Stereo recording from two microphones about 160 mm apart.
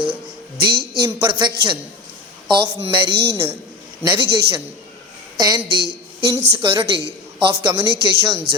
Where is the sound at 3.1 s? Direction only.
90° right.